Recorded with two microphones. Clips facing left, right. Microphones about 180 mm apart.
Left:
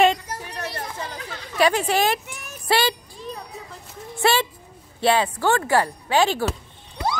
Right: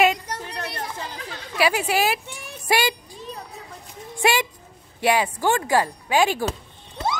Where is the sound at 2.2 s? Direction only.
30° right (ahead or behind).